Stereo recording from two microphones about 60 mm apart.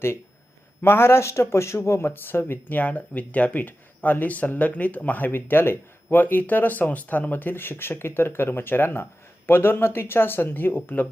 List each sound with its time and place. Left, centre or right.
0.8 s speech: left